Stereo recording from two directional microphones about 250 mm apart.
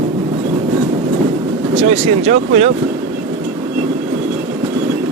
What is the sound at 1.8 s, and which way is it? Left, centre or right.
Speech, right.